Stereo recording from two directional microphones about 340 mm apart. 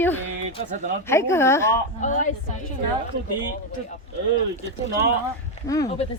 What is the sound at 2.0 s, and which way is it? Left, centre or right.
Speech, left.